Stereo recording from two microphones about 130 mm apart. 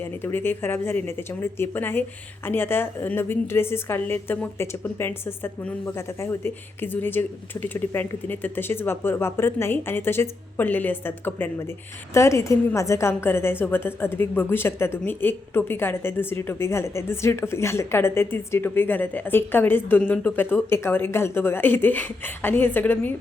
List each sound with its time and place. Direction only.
0.3 s a woman's voice: 15° left (ahead or behind)